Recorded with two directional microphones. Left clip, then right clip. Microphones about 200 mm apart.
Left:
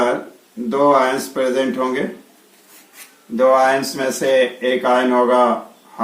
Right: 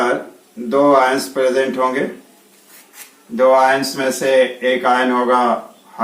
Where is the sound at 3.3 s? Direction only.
10° right (ahead or behind).